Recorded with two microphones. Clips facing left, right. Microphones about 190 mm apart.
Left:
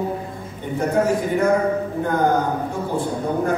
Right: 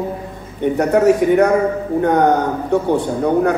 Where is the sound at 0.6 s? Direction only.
70° right (ahead or behind).